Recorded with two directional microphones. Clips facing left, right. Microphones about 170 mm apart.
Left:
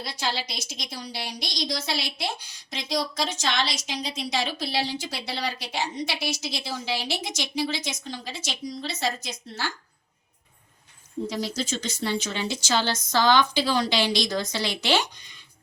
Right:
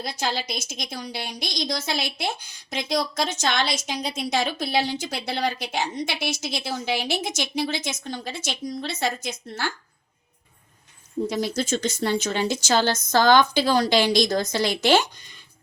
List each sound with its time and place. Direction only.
0.0 s a woman's voice: 45° right (ahead or behind)
11.3 s a woman's voice: 55° right (ahead or behind)